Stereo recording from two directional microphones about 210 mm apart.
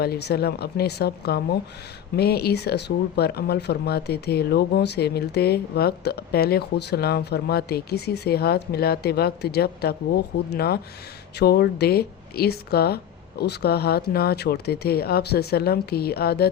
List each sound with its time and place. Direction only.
0.0 s speech: 50° left (ahead or behind)